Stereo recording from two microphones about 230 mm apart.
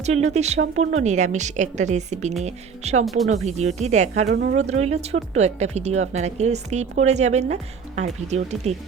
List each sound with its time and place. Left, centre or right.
0.0 s a woman's voice: right
4.3 s speech: right
4.5 s speech: right